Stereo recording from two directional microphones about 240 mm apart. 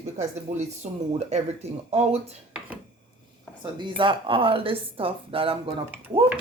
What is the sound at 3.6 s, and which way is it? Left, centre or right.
Speech, centre.